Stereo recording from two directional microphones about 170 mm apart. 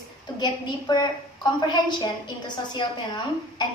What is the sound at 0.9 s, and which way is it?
A woman's voice, 25° left (ahead or behind).